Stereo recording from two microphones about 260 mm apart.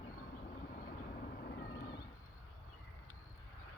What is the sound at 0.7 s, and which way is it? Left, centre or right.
Vehicle, left.